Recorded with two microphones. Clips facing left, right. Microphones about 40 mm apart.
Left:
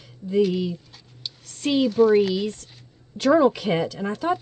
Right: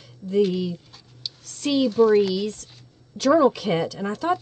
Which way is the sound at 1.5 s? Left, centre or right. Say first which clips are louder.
Even; centre.